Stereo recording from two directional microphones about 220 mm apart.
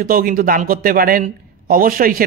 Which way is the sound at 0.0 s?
40° right (ahead or behind).